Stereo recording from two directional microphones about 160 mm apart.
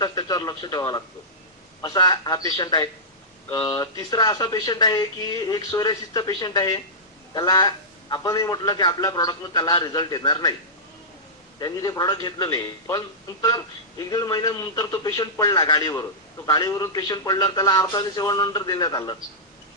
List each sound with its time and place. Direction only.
0.0 s a man's voice: 25° left (ahead or behind)
11.6 s a man's voice: 25° left (ahead or behind)